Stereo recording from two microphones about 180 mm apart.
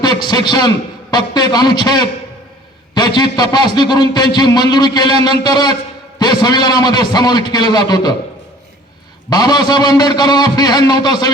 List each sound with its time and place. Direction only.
0.0 s a man's voice: 25° left (ahead or behind)
9.3 s a man's voice: 20° left (ahead or behind)